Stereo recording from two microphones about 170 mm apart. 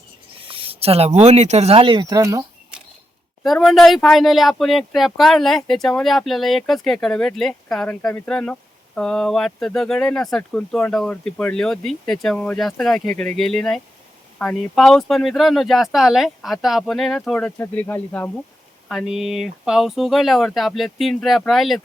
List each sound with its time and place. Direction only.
0.3 s speech: 30° right (ahead or behind)
3.4 s speech: centre (ahead or behind)
18.9 s speech: centre (ahead or behind)